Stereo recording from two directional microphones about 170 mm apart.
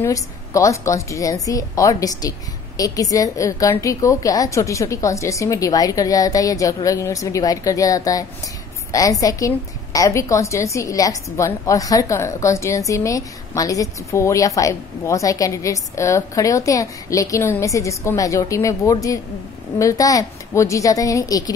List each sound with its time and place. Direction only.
0.0 s a woman's voice: 20° left (ahead or behind)